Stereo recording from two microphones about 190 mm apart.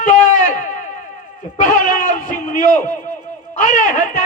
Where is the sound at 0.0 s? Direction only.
45° left (ahead or behind).